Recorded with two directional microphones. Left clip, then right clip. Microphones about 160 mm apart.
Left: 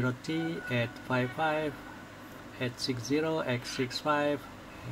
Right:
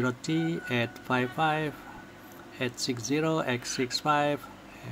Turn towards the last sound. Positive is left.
turn(degrees=-35)  # may be behind; listen again after turning